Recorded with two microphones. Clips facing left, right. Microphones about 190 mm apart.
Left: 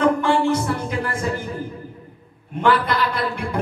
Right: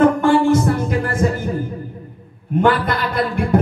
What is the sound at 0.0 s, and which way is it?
Music, 50° right (ahead or behind).